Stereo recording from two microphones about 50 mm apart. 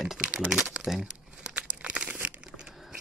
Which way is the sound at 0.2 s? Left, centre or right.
Right.